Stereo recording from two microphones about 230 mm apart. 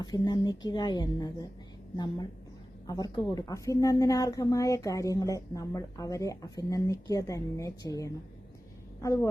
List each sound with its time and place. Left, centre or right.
0.0 s a woman's voice: centre
2.8 s a woman's voice: centre